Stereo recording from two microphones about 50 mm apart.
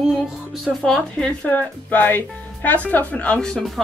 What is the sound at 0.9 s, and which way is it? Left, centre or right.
Speech, centre.